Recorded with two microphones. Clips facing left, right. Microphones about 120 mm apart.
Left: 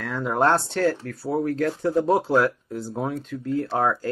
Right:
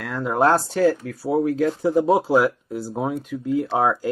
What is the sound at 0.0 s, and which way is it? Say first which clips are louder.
Speech: right 2 dB; centre (ahead or behind).